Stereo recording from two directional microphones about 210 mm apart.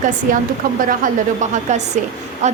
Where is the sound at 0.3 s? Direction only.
40° right (ahead or behind).